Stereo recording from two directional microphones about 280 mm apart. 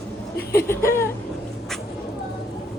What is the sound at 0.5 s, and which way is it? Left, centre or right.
Speech, centre.